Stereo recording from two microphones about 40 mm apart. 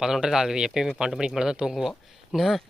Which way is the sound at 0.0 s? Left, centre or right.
Centre.